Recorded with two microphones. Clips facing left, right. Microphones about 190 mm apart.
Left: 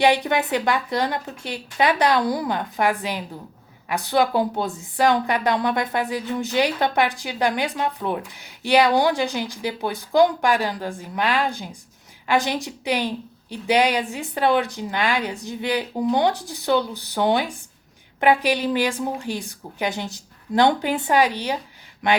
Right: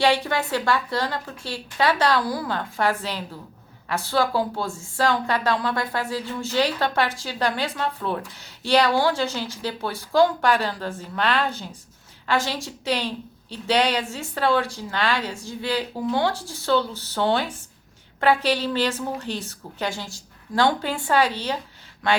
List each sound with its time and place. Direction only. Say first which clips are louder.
0.0 s a woman's voice: left 2 dB; 15° left (ahead or behind)